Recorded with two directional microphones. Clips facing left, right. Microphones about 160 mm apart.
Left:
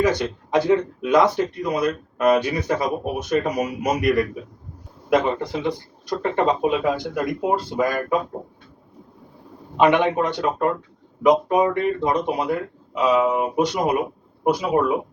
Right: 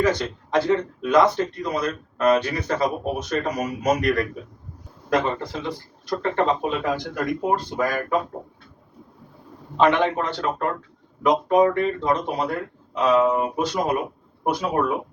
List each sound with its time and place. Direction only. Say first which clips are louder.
0.0 s speech: left 1 dB; 20° left (ahead or behind); by 7.9 s centre (ahead or behind)
9.7 s speech: left 2 dB; 15° left (ahead or behind)